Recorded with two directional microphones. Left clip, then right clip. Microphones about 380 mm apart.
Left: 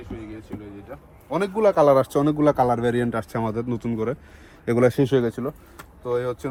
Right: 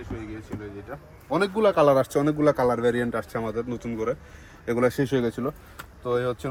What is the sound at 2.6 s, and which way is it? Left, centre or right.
Speech, left.